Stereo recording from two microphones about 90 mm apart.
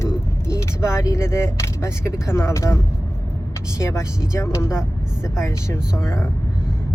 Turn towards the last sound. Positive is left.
turn(degrees=30)  # may be behind; listen again after turning